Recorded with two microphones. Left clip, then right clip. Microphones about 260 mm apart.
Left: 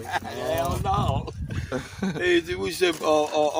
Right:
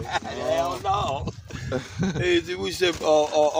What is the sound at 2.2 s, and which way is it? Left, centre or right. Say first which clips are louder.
Speech: left 1 dB; centre.